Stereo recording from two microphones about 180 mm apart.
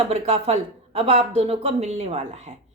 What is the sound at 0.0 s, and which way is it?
A woman's voice, 35° right (ahead or behind).